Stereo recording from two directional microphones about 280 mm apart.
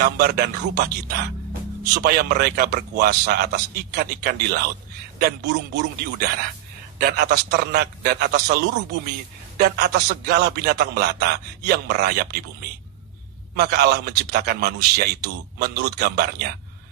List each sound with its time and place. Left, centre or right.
0.0 s a man's voice: right
9.6 s a man's voice: right